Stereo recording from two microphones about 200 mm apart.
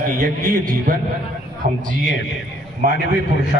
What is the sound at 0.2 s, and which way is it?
Speech, 45° right (ahead or behind).